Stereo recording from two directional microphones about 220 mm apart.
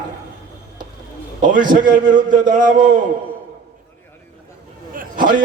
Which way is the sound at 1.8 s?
35° right (ahead or behind).